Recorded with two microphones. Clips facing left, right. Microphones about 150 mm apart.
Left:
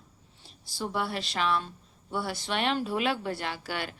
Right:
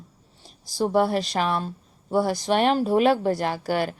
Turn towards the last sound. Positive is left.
turn(degrees=-40)  # may be behind; listen again after turning